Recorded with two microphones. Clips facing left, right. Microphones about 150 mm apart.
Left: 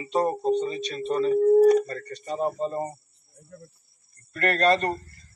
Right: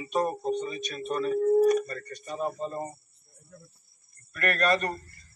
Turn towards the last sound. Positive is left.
turn(degrees=30)  # may be behind; listen again after turning